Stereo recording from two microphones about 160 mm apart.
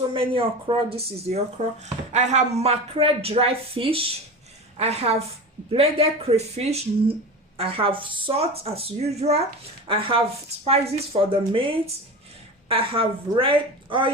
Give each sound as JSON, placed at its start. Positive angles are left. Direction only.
{"t": 0.1, "sound": "speech", "side_deg": -35}